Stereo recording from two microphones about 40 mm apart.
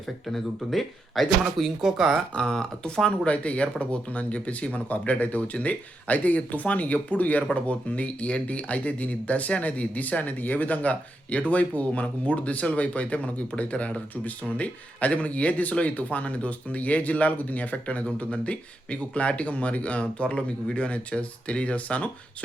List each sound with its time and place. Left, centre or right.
0.3 s speech: centre
2.4 s speech: centre
3.2 s speech: left